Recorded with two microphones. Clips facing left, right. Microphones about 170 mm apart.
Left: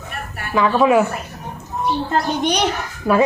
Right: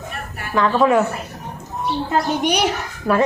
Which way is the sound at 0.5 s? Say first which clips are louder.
Left 1 dB; 10° left (ahead or behind).